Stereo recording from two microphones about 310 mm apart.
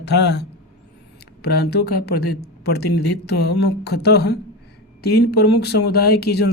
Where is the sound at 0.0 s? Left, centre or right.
Left.